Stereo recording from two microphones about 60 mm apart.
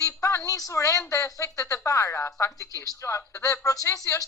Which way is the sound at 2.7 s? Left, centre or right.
Left.